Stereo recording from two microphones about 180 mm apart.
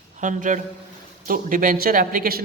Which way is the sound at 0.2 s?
45° right (ahead or behind).